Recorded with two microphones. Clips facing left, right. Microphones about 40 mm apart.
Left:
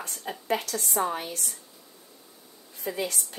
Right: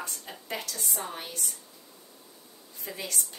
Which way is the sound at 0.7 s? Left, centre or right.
Left.